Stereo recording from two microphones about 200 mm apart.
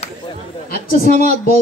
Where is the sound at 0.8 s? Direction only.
45° left (ahead or behind).